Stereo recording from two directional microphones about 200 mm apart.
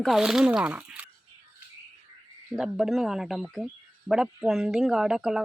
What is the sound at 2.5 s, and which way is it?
Speech, 5° right (ahead or behind).